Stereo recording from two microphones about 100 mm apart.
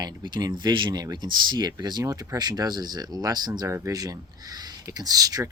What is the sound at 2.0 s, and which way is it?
Speech, 30° right (ahead or behind).